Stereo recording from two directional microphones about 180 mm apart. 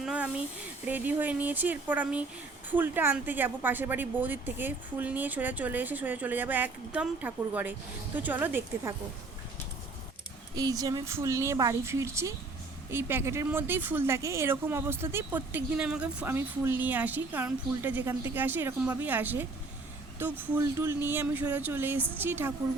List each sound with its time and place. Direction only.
0.0 s a sound: 5° right (ahead or behind)
0.9 s speech: 10° right (ahead or behind)
10.5 s speech: 20° right (ahead or behind)